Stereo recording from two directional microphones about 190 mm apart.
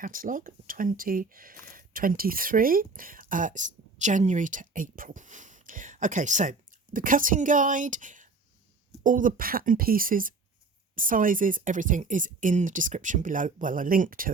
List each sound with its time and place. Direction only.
0.0 s speech: 45° right (ahead or behind)